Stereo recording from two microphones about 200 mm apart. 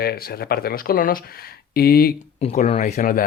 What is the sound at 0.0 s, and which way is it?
Speech, 50° left (ahead or behind).